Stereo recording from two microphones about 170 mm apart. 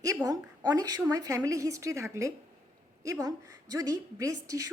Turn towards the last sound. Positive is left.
turn(degrees=-20)  # may be behind; listen again after turning